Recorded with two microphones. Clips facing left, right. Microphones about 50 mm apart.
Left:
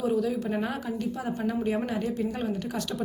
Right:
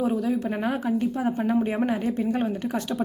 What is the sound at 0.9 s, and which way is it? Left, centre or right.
A woman's voice, right.